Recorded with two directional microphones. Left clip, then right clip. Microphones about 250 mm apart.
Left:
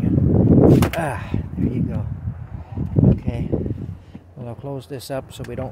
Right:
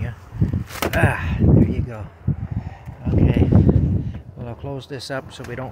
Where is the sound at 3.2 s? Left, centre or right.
Centre.